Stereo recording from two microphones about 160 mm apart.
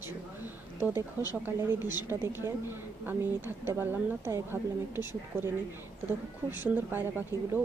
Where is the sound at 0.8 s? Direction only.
15° right (ahead or behind).